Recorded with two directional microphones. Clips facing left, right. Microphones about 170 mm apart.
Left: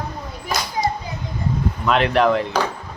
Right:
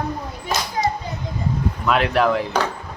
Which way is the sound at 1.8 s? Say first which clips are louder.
Left 1 dB; 5° right (ahead or behind).